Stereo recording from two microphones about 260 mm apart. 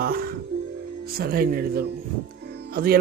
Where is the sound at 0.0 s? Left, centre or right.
Right.